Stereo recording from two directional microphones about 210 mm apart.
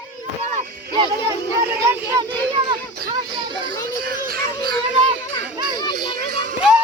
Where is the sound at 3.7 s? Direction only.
45° right (ahead or behind).